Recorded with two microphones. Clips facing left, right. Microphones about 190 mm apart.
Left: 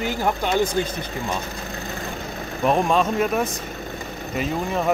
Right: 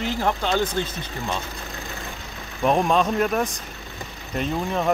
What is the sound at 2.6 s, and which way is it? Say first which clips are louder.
Speech: even; centre (ahead or behind).